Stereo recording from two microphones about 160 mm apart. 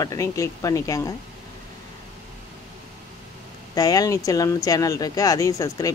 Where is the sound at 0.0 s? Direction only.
20° left (ahead or behind).